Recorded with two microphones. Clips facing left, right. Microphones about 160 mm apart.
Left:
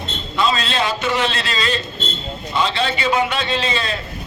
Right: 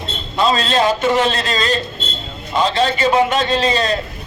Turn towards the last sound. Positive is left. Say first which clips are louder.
# right 5 dB
turn(degrees=-40)  # may be behind; listen again after turning